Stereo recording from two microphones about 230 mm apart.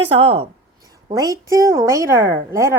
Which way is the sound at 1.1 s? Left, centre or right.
Centre.